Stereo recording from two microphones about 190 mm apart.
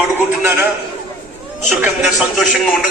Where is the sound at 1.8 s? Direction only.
5° right (ahead or behind).